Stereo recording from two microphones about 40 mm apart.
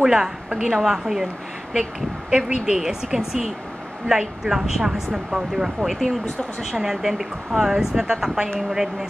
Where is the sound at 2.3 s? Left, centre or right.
Centre.